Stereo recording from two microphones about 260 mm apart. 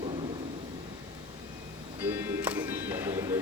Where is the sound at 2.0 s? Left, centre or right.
Centre.